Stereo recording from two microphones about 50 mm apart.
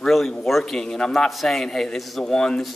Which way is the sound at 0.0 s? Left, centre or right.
Centre.